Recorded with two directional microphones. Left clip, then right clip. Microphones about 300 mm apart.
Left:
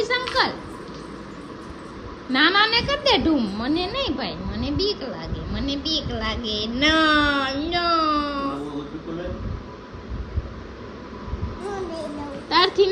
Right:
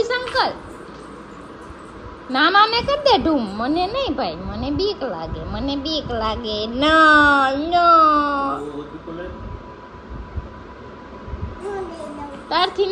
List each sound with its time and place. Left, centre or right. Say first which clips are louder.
0.0 s a sound: right 2 dB; centre
2.3 s speech: right 3 dB; centre
5.0 s speech: right 6 dB; right
5.3 s speech: right 3 dB; centre
12.5 s a child's voice: left 1 dB; centre